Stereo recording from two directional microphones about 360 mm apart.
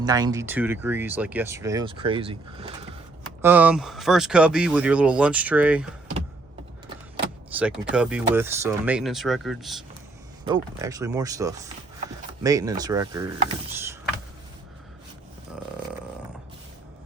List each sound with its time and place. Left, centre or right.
0.0 s speech: centre
3.4 s speech: centre
7.5 s speech: centre
10.4 s speech: centre
13.7 s mechanisms: centre